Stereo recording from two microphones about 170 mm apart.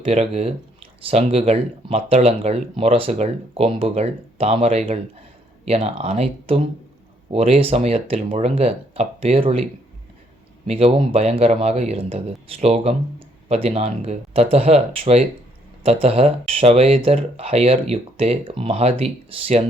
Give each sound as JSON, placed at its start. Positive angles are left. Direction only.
{"t": 0.0, "sound": "speech", "side_deg": -35}
{"t": 10.7, "sound": "speech", "side_deg": -35}